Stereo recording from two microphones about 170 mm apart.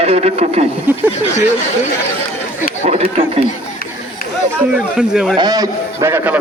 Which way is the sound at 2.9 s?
35° right (ahead or behind).